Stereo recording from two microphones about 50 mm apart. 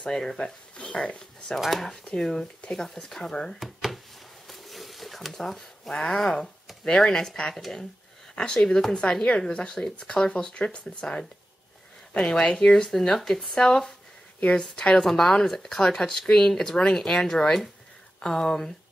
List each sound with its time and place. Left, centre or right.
0.0 s speech: centre
1.6 s speech: centre
3.6 s a sound: centre
6.8 s speech: centre